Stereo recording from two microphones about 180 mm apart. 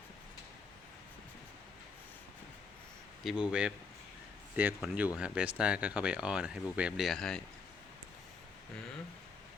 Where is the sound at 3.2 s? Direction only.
5° right (ahead or behind).